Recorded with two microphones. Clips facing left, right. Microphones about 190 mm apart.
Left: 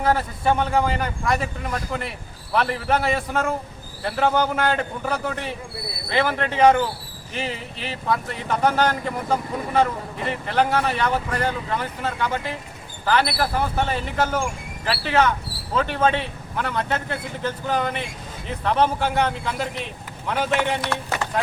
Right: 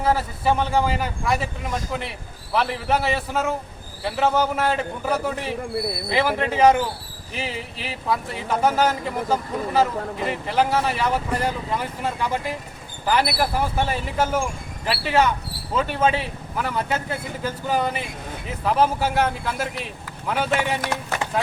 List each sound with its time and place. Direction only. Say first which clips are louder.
0.0 s speech: even; 5° right (ahead or behind)